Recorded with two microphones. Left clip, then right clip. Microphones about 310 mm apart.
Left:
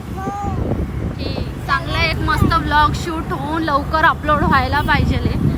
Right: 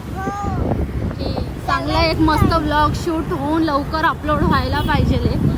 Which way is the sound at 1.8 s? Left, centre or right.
Centre.